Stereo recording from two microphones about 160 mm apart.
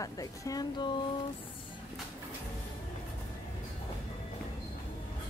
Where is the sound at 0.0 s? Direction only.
20° left (ahead or behind).